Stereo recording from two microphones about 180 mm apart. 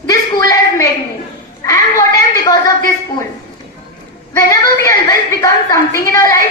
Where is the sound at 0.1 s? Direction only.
20° left (ahead or behind).